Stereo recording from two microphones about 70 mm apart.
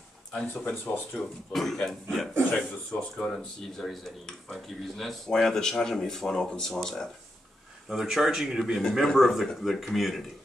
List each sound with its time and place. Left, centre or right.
0.3 s speech: centre
1.5 s speech: centre
7.9 s speech: centre